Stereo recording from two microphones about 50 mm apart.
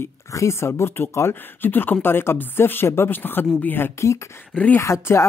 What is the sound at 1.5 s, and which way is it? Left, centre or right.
Speech, left.